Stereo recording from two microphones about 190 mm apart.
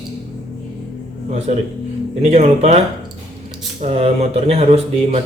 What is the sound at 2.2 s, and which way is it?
Speech, 35° right (ahead or behind).